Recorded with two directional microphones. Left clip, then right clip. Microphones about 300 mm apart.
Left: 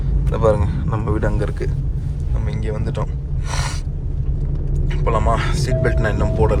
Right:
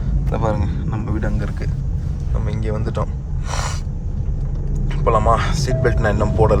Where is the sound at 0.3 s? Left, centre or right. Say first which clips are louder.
Left 5 dB; centre.